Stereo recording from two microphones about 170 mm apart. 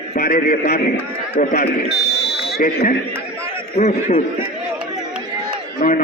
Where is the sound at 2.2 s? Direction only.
70° left (ahead or behind).